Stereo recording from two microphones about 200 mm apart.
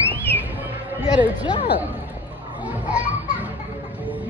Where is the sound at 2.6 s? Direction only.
10° right (ahead or behind).